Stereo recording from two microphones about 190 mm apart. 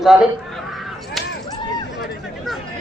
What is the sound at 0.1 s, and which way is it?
Speech, centre (ahead or behind).